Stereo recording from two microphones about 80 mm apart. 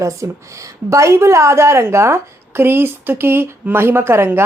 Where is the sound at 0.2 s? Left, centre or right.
Right.